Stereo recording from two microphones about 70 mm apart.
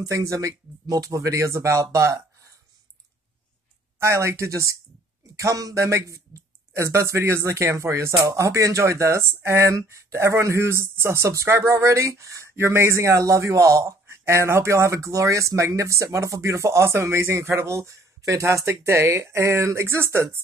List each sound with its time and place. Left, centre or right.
0.0 s speech: right
4.0 s speech: right
5.9 s speech: right